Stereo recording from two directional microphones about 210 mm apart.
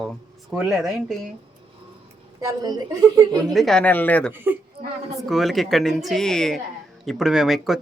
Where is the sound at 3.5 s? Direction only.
Centre (ahead or behind).